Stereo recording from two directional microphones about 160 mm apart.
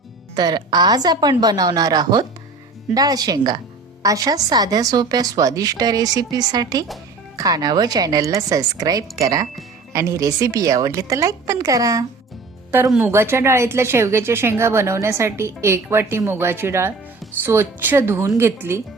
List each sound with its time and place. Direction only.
0.3 s a woman's voice: 25° right (ahead or behind)